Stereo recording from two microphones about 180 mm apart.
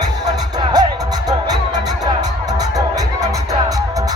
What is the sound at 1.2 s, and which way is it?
Music, 20° right (ahead or behind).